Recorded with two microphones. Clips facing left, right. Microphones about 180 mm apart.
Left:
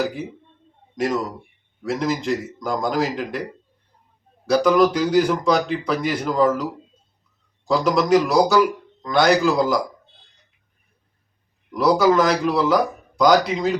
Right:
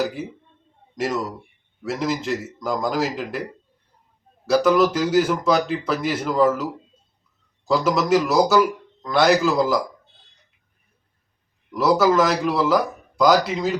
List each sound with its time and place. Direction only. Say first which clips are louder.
0.9 s speech: left 2 dB; centre (ahead or behind)
4.4 s speech: left 1 dB; centre (ahead or behind)
11.7 s speech: left 1 dB; centre (ahead or behind)